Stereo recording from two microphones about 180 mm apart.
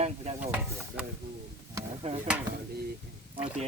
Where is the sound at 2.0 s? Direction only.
35° right (ahead or behind).